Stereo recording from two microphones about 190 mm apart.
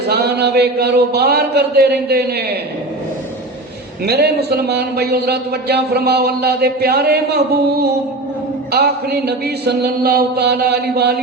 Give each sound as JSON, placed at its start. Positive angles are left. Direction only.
{"t": 0.1, "sound": "a man's voice", "side_deg": -55}
{"t": 4.0, "sound": "a man's voice", "side_deg": -55}